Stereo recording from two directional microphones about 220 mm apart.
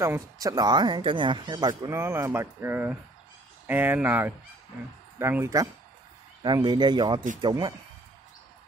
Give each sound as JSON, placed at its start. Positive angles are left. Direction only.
{"t": 0.0, "sound": "speech", "side_deg": -15}